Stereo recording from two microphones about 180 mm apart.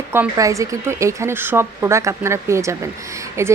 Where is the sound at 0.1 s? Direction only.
15° right (ahead or behind).